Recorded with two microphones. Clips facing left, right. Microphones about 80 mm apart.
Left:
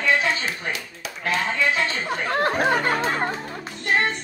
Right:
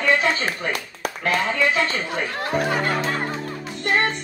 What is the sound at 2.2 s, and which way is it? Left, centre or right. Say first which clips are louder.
Music: left 5 dB; left.